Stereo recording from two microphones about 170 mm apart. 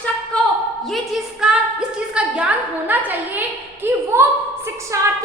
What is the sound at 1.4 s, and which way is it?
A woman's voice, 5° right (ahead or behind).